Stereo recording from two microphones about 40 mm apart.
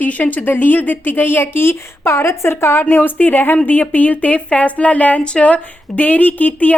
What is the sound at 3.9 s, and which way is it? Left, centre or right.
A woman's voice, left.